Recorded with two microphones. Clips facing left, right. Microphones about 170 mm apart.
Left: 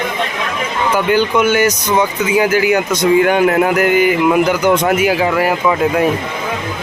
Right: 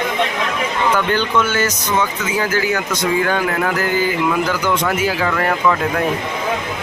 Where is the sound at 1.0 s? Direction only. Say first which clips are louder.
Left 4 dB; 10° left (ahead or behind).